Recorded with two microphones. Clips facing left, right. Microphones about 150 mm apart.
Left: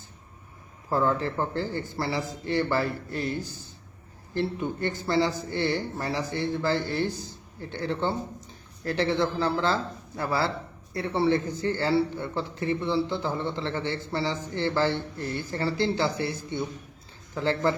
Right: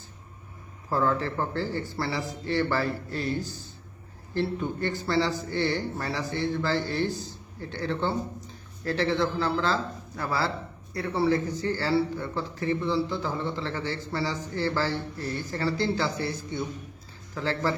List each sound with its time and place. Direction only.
0.9 s a man's voice: 20° left (ahead or behind)